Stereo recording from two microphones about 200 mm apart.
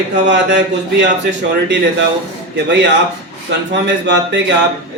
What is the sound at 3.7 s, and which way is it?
Speech, 60° right (ahead or behind).